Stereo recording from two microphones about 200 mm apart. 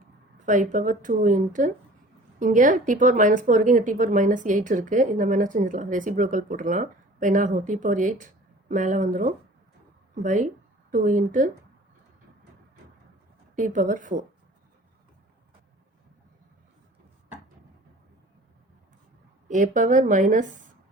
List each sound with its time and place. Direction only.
0.4 s a woman's voice: 40° right (ahead or behind)
13.6 s a woman's voice: 40° right (ahead or behind)
19.5 s a woman's voice: 40° right (ahead or behind)